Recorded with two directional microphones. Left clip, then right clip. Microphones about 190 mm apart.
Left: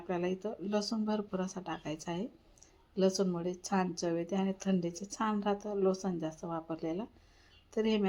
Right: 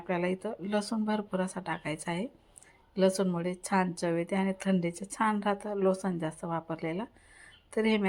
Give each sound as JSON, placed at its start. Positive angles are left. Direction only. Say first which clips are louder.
{"t": 0.1, "sound": "a woman's voice", "louder": "right 4 dB", "side_deg": -20}